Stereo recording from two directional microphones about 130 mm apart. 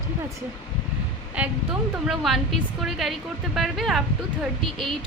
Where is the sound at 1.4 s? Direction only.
10° right (ahead or behind).